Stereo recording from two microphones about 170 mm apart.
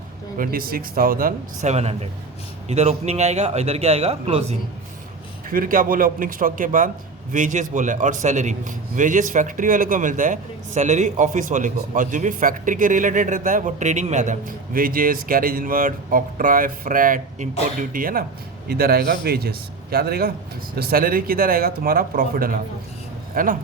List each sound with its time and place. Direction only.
0.3 s speech: 60° right (ahead or behind)
1.7 s a man's voice: 40° right (ahead or behind)
5.5 s a man's voice: 55° right (ahead or behind)